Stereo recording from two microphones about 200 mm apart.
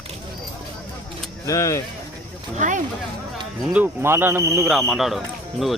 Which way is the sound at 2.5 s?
40° right (ahead or behind).